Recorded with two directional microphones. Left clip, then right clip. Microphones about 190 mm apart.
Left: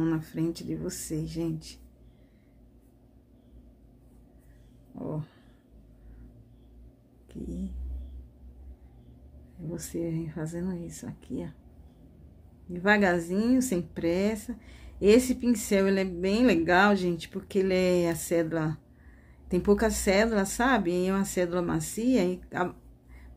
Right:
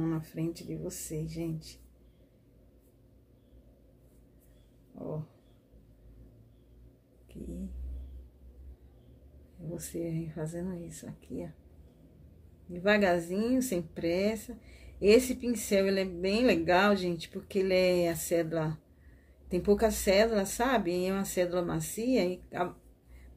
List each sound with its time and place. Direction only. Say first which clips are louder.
0.0 s speech: left 5 dB; 35° left (ahead or behind)
9.7 s a woman's voice: left 3 dB; 20° left (ahead or behind)
12.7 s a woman's voice: left 2 dB; 25° left (ahead or behind)